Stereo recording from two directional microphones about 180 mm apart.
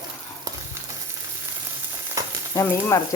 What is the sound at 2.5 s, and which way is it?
Frying, 15° left (ahead or behind).